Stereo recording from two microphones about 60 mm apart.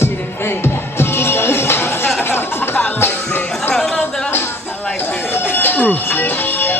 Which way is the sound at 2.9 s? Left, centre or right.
Left.